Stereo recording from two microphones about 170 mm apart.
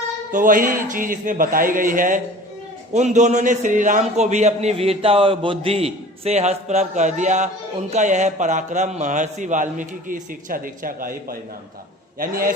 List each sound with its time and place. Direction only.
0.3 s a man's voice: 55° right (ahead or behind)